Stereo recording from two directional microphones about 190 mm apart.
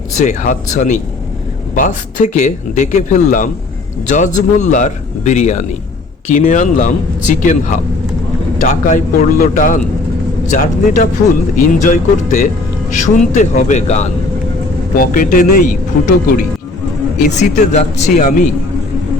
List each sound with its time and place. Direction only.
0.2 s a man's voice: 40° left (ahead or behind)
14.9 s a man's voice: 45° left (ahead or behind)
17.2 s a man's voice: 40° left (ahead or behind)